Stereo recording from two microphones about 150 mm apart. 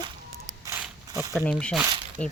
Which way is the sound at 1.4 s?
5° left (ahead or behind).